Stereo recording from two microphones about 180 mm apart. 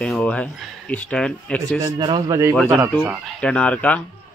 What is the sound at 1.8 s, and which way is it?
Speech, 20° right (ahead or behind).